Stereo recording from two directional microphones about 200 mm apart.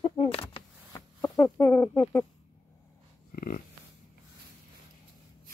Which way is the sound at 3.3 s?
45° left (ahead or behind).